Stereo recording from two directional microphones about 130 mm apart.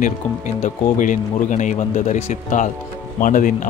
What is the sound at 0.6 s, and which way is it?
Speech, 80° left.